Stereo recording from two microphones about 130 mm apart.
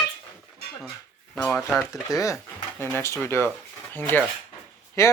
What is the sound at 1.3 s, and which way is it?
Speech, centre (ahead or behind).